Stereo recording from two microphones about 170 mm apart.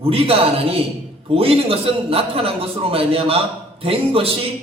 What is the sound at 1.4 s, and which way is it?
A man's voice, 35° right (ahead or behind).